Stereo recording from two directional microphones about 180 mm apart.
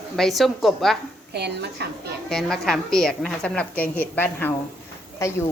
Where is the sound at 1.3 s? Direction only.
65° right (ahead or behind).